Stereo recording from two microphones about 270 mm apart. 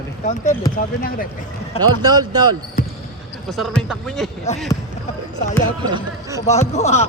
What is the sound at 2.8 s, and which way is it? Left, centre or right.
Basketball bounce, left.